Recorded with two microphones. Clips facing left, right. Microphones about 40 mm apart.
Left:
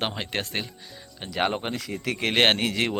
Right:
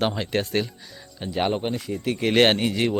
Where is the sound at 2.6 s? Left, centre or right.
Left.